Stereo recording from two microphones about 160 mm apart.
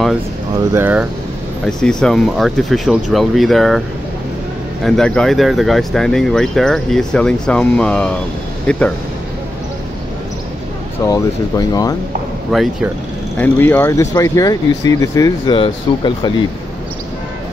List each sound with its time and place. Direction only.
0.7 s speech: 10° right (ahead or behind)
1.7 s speech: 5° left (ahead or behind)
4.8 s speech: 5° left (ahead or behind)
11.1 s speech: 20° left (ahead or behind)
12.5 s speech: centre (ahead or behind)
13.4 s speech: 10° left (ahead or behind); by 16.3 s 30° left (ahead or behind)